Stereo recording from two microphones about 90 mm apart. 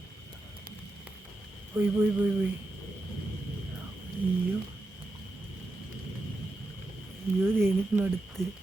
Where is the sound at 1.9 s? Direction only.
20° right (ahead or behind).